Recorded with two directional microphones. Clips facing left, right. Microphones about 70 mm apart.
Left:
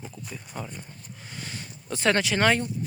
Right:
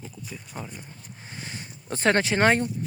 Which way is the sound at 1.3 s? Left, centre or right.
Right.